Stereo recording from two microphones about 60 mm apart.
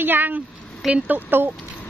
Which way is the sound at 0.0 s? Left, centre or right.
Right.